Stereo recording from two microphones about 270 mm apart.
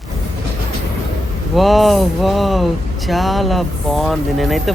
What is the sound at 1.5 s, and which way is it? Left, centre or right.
Speech, centre.